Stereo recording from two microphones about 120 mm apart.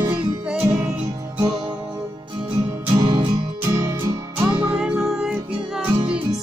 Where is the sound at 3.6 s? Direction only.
25° right (ahead or behind); by 5.9 s 10° right (ahead or behind).